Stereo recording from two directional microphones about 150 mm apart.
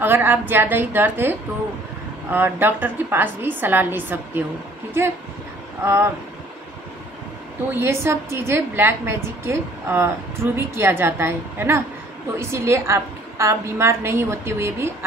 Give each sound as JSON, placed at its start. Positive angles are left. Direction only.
{"t": 0.0, "sound": "a woman's voice", "side_deg": -15}
{"t": 2.3, "sound": "a woman's voice", "side_deg": -15}
{"t": 7.7, "sound": "a woman's voice", "side_deg": -15}